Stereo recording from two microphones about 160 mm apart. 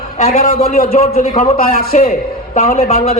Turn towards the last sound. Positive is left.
turn(degrees=55)  # may be behind; listen again after turning